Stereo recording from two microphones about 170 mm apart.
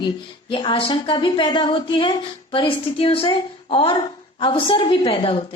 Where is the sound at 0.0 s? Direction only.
30° left (ahead or behind).